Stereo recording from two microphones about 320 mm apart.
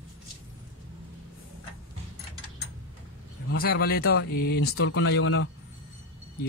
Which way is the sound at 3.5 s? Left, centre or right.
Left.